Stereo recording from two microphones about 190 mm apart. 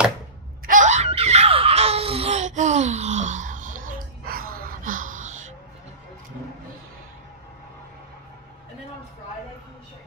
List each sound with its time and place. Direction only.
0.7 s screaming: 40° right (ahead or behind)